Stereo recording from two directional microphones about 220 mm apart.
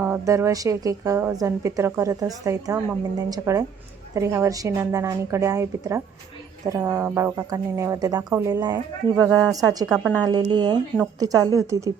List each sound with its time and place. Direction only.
0.0 s a woman's voice: 10° right (ahead or behind)